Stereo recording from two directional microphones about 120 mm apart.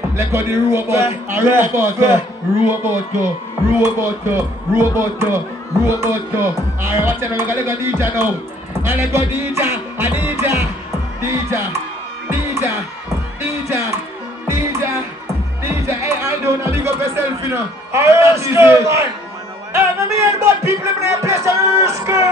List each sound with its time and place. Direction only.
0.1 s speech: 20° right (ahead or behind)
11.1 s music: 20° right (ahead or behind)
15.9 s a sound: 20° right (ahead or behind)